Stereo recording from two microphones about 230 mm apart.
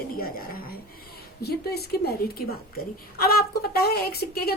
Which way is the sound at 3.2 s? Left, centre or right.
Left.